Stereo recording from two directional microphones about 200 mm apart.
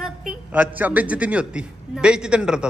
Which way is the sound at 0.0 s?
Centre (ahead or behind).